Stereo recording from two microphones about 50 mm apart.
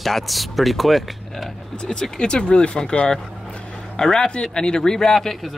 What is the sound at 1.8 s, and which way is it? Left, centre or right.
Speech, centre.